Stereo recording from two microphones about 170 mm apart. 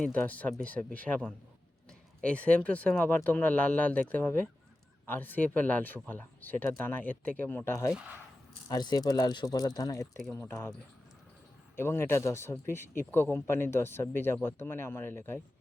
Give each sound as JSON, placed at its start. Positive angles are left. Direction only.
{"t": 0.0, "sound": "speech", "side_deg": 10}
{"t": 11.8, "sound": "speech", "side_deg": 15}